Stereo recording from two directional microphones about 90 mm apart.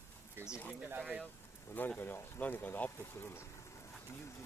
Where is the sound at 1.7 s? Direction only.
25° left (ahead or behind).